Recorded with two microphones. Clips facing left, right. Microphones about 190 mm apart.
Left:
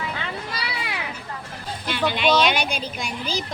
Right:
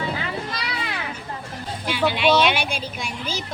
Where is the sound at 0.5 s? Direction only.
10° left (ahead or behind).